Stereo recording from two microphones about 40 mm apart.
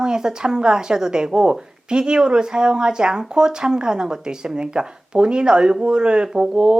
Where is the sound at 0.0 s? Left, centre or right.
Centre.